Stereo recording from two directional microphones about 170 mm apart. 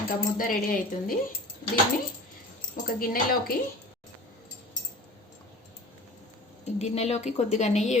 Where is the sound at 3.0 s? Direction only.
60° left (ahead or behind).